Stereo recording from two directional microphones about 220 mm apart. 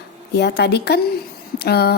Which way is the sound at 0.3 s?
50° left (ahead or behind).